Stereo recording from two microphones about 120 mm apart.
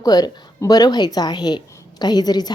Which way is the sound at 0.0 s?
30° left (ahead or behind).